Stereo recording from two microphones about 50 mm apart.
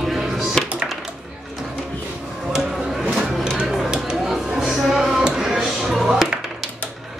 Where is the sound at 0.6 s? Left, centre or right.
Centre.